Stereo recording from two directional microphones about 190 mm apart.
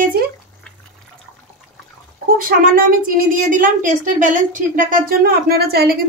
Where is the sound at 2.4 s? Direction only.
50° right (ahead or behind).